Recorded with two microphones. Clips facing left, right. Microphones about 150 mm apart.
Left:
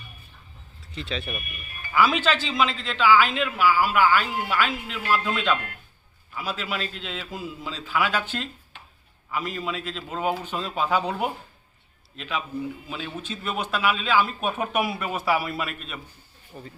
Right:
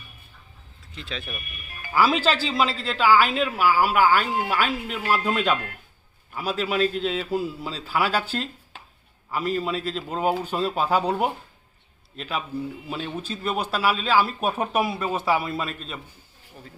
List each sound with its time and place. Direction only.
0.9 s speech: centre (ahead or behind)
1.9 s a man's voice: 30° right (ahead or behind)